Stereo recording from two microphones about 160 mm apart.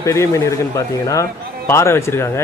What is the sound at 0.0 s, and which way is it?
A man's voice, 20° left (ahead or behind).